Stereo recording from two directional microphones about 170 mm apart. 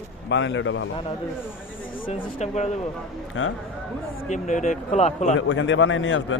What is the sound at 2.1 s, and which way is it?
Speech, 40° left (ahead or behind).